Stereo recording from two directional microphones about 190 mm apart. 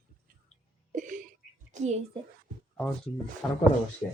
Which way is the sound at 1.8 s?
35° right (ahead or behind).